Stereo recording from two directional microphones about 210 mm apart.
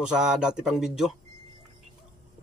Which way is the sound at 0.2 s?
5° right (ahead or behind).